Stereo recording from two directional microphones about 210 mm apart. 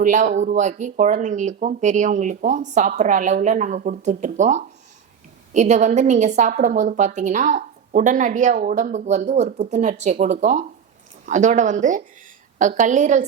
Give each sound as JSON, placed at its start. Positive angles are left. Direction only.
{"t": 0.0, "sound": "a woman's voice", "side_deg": -35}